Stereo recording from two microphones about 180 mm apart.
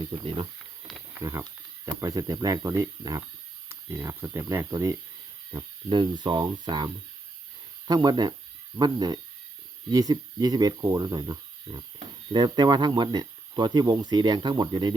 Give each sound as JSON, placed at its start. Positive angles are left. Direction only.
{"t": 0.1, "sound": "speech", "side_deg": -25}